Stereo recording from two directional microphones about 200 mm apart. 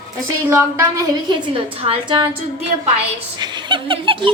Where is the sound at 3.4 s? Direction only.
20° right (ahead or behind).